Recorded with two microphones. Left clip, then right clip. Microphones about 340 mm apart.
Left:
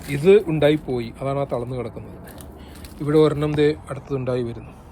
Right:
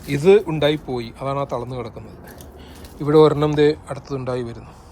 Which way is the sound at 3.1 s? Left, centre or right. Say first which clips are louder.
Right 4 dB; centre.